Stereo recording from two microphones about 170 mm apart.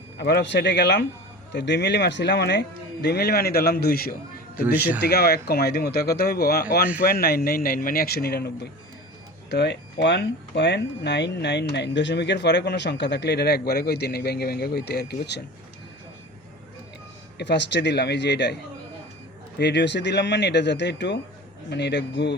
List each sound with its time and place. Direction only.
0.2 s speech: 80° left
9.5 s speech: 90° left; by 15.4 s 70° left (ahead or behind)
17.3 s speech: 85° left
19.5 s speech: 80° left